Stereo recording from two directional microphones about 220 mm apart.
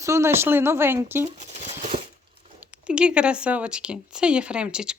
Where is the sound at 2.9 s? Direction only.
5° right (ahead or behind).